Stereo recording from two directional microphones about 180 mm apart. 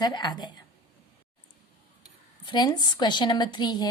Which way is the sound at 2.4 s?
25° left (ahead or behind).